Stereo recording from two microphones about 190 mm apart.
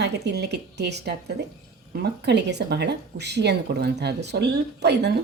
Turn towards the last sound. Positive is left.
turn(degrees=-60)  # may be behind; listen again after turning